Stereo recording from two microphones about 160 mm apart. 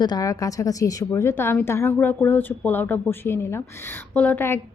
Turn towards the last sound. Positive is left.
turn(degrees=15)  # may be behind; listen again after turning